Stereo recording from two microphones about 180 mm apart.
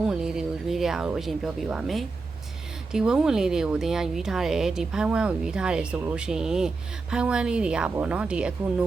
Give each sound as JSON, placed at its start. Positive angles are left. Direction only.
{"t": 0.1, "sound": "speech", "side_deg": -5}